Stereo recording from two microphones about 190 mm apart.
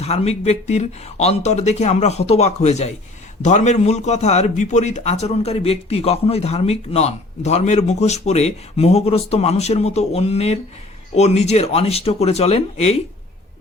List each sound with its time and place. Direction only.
0.0 s a man's voice: 35° left (ahead or behind)